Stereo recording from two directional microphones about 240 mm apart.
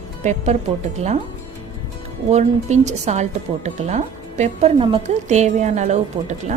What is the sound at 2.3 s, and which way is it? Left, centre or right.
A woman's voice, right.